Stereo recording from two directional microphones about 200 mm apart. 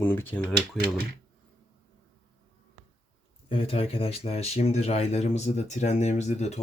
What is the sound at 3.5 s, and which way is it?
Speech, 25° left (ahead or behind).